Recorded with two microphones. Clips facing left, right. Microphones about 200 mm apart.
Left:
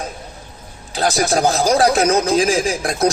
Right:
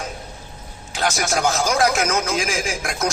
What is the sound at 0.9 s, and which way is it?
A man's voice, 35° left (ahead or behind).